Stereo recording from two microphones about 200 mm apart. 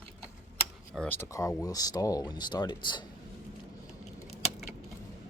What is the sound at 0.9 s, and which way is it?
Speech, 5° left (ahead or behind).